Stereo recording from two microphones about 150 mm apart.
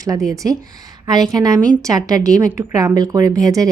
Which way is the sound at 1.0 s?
25° right (ahead or behind).